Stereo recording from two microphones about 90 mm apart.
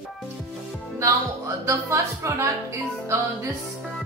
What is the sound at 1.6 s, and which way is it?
Speech, 35° right (ahead or behind).